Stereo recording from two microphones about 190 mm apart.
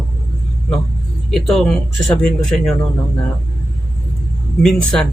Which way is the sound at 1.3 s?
Centre (ahead or behind).